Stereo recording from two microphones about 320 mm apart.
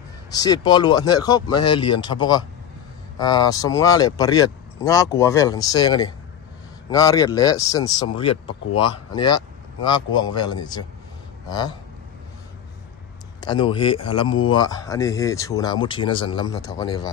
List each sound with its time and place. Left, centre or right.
0.3 s speech: centre
13.4 s speech: centre